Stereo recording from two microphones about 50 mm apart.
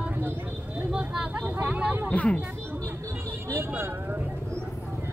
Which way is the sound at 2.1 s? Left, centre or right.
Left.